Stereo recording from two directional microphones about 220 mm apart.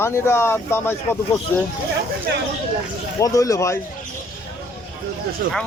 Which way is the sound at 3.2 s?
15° left (ahead or behind).